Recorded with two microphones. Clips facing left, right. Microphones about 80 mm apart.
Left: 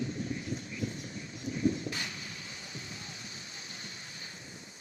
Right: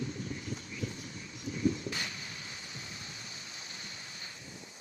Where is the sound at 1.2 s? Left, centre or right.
Left.